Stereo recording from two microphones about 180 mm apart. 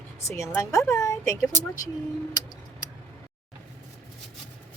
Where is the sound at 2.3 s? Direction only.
20° left (ahead or behind).